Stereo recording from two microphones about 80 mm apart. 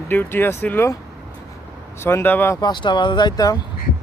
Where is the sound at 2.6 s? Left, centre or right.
Left.